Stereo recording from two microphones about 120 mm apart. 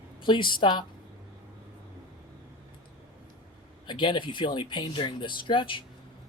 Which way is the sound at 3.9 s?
40° left (ahead or behind).